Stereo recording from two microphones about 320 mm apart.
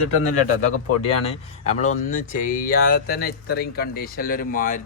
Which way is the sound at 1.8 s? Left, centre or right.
Left.